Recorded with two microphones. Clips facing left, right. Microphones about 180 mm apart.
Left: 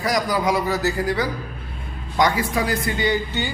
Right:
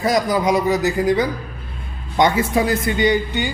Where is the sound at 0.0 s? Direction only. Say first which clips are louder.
Right 4 dB; 25° right (ahead or behind).